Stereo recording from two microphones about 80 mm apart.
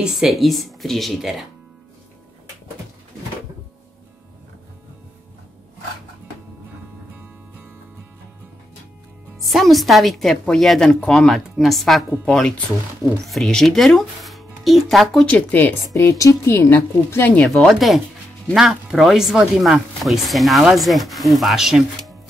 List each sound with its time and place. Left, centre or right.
0.0 s speech: centre
9.5 s speech: centre
15.2 s a woman's voice: centre
15.9 s a woman's voice: left
17.7 s speech: centre